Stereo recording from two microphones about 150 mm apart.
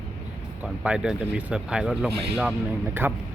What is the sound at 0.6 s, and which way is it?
Speech, 5° right (ahead or behind).